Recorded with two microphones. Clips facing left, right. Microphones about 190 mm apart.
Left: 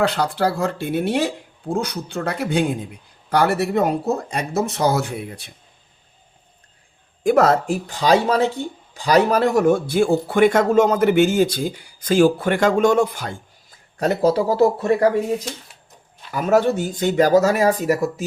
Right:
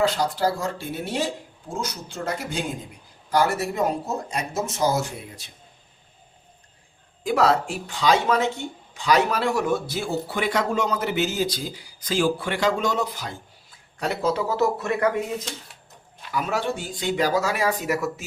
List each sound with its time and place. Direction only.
0.0 s speech: 65° left (ahead or behind)
7.3 s a man's voice: 50° left (ahead or behind); by 15.2 s 30° left (ahead or behind)
16.3 s a man's voice: 45° left (ahead or behind)